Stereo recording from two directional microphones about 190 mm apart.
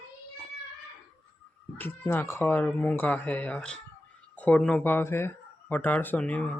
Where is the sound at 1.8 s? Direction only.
10° left (ahead or behind).